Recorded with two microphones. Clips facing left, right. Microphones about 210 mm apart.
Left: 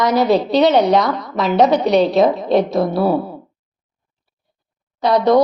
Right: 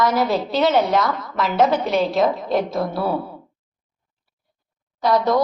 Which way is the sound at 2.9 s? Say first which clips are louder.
Left 6 dB; 25° left (ahead or behind).